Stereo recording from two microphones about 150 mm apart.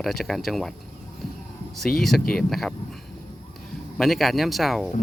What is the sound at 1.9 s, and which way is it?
Speech, centre (ahead or behind).